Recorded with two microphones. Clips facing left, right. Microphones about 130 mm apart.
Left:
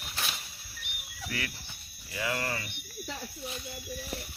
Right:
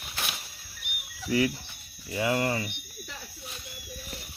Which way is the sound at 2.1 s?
25° right (ahead or behind).